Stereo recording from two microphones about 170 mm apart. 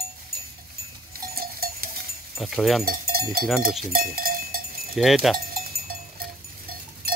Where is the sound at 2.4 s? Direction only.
Centre (ahead or behind).